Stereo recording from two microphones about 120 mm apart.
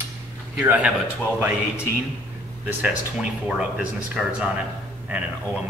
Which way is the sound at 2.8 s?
5° right (ahead or behind).